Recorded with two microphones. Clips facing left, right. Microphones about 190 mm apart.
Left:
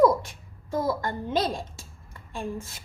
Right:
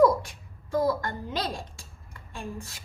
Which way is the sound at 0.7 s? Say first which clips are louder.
Right 1 dB; 25° left (ahead or behind).